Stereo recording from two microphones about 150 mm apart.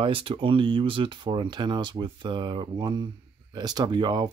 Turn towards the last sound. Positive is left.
turn(degrees=-30)  # may be behind; listen again after turning